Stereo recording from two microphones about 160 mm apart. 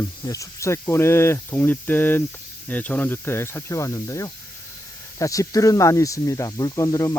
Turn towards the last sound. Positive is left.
turn(degrees=20)  # may be behind; listen again after turning